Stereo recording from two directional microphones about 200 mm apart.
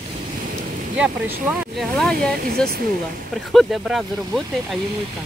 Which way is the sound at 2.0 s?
5° left (ahead or behind).